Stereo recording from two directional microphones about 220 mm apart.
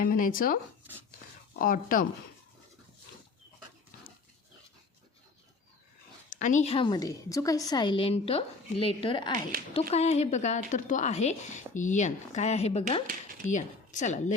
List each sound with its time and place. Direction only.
0.0 s a woman's voice: 40° left (ahead or behind)
6.3 s a woman's voice: 35° left (ahead or behind)